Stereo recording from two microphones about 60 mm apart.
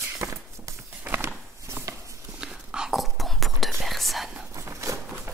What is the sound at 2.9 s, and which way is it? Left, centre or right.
Whispering, centre.